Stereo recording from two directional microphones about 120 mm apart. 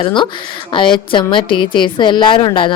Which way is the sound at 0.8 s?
45° left (ahead or behind).